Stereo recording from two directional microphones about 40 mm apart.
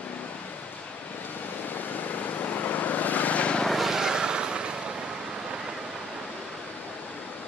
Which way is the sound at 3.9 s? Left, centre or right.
Centre.